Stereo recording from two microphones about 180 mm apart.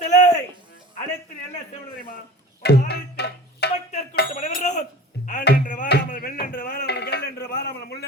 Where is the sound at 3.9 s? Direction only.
40° left (ahead or behind).